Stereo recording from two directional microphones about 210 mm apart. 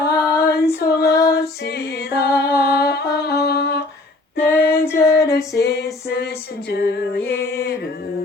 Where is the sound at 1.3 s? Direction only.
50° left (ahead or behind).